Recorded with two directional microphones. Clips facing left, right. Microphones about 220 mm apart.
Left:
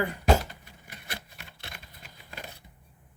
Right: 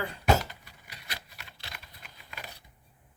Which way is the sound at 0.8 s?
50° left (ahead or behind).